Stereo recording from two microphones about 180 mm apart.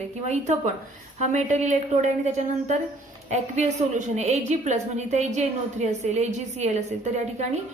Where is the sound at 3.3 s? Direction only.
40° right (ahead or behind).